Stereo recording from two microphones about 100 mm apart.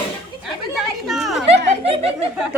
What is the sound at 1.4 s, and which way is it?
Speech, 90° right.